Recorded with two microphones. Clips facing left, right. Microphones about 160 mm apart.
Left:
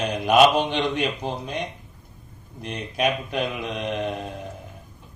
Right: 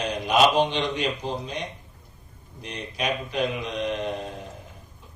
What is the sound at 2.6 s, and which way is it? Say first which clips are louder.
Speech: left 6 dB; 55° left (ahead or behind).